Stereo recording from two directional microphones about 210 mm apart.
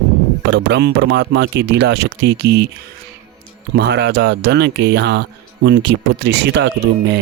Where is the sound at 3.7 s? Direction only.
50° right (ahead or behind).